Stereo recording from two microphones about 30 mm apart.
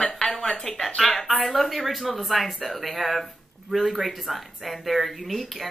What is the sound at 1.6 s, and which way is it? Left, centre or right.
Speech, centre.